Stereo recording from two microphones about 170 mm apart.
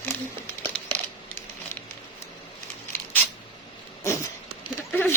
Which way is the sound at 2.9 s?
10° left (ahead or behind).